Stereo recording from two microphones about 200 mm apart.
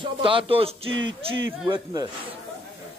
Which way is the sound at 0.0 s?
25° right (ahead or behind).